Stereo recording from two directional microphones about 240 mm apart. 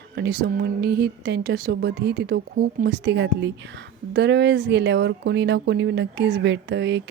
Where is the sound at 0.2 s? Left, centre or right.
Right.